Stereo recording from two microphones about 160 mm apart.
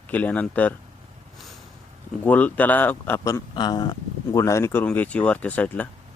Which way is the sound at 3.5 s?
25° left (ahead or behind).